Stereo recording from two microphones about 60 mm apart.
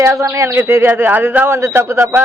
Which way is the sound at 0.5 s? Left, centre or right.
Right.